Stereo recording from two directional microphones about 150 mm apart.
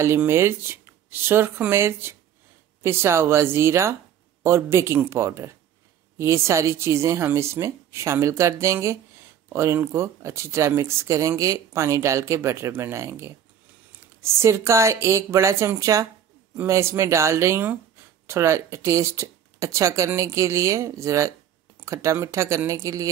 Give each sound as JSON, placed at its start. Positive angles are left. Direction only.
{"t": 0.0, "sound": "speech", "side_deg": -15}